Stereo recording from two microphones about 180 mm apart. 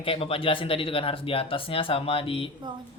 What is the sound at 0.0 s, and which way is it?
Speech, 30° left (ahead or behind).